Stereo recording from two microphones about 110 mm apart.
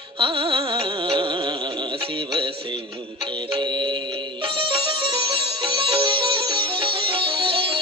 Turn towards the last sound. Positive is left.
turn(degrees=-55)  # may be behind; listen again after turning